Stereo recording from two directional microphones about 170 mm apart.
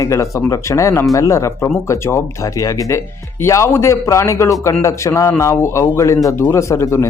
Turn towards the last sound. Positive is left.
turn(degrees=15)  # may be behind; listen again after turning